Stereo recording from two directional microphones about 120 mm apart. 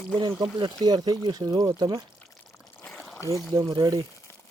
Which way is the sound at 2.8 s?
5° left (ahead or behind).